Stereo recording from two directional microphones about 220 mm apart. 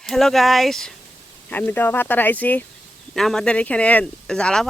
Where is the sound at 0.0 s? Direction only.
Centre (ahead or behind).